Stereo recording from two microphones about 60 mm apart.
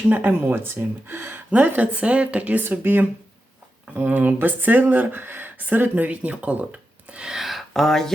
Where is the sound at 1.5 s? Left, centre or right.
Right.